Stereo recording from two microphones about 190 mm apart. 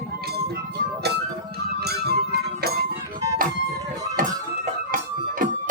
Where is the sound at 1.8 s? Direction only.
55° right (ahead or behind).